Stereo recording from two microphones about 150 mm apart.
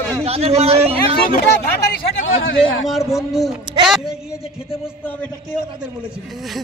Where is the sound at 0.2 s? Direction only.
45° right (ahead or behind).